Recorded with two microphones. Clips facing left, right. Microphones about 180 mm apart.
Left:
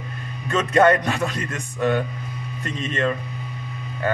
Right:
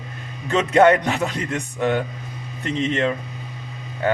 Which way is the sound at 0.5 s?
20° right (ahead or behind).